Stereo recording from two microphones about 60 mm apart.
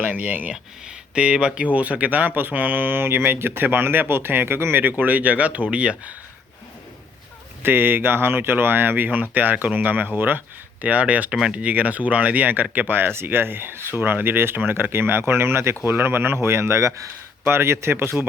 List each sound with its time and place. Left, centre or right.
0.0 s speech: right
7.6 s speech: right
10.2 s a sound: right
10.8 s speech: right
11.3 s speech: centre
11.5 s speech: right
17.5 s speech: right